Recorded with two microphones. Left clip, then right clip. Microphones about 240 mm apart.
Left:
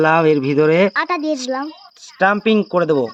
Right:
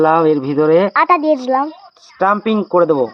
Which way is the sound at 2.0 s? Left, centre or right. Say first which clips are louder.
Right 1 dB; left.